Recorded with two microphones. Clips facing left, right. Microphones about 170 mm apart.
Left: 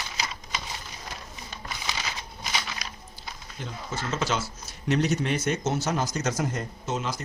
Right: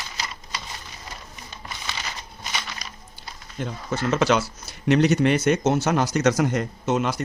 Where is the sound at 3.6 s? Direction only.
55° right (ahead or behind).